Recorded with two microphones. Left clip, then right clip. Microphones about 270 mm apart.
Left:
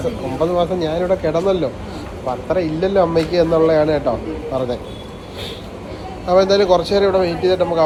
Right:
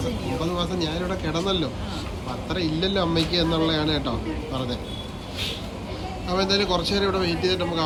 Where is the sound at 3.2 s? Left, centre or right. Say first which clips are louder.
Left 9 dB; centre.